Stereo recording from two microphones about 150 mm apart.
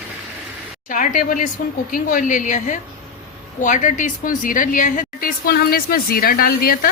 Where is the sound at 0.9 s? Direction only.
60° left (ahead or behind).